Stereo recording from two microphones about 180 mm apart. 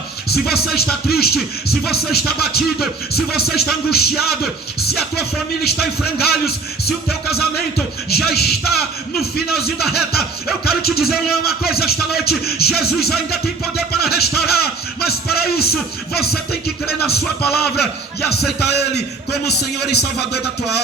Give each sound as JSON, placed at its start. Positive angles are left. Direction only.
{"t": 0.3, "sound": "music", "side_deg": 60}
{"t": 6.1, "sound": "music", "side_deg": 60}